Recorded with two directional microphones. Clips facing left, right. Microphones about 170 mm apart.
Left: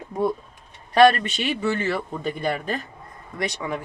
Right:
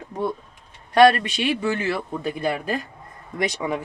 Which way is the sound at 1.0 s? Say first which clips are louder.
Right 1 dB; 10° right (ahead or behind).